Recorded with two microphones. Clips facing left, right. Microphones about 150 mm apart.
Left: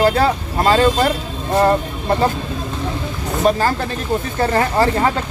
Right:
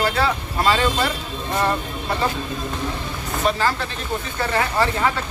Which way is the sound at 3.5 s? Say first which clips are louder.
Left 4 dB; 40° left (ahead or behind).